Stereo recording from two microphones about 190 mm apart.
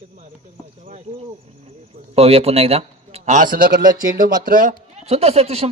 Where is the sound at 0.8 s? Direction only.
35° right (ahead or behind).